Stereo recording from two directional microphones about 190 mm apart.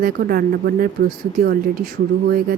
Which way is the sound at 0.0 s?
50° right (ahead or behind).